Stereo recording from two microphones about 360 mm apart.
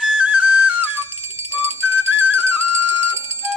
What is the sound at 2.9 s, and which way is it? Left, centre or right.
Music, centre.